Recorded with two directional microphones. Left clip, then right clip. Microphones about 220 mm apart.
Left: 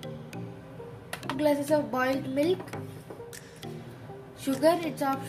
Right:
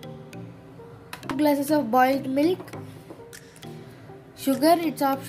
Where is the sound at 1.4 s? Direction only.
40° right (ahead or behind).